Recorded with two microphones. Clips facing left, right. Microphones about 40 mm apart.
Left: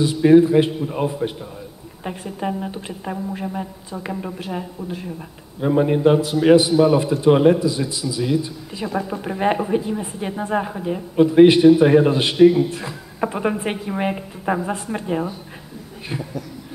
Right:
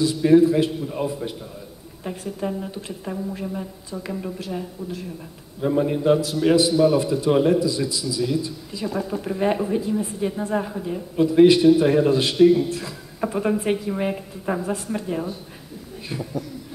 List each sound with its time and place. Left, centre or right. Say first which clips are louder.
0.0 s a man's voice: left 3 dB; left